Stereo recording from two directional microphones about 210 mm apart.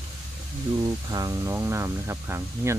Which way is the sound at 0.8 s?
15° right (ahead or behind).